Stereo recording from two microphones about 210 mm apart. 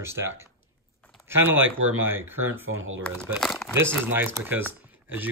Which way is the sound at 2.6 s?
75° right (ahead or behind).